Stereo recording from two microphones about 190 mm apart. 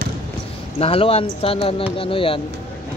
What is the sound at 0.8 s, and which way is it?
Speech, 30° left (ahead or behind).